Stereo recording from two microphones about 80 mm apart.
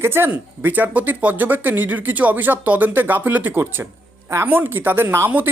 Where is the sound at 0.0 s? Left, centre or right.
Right.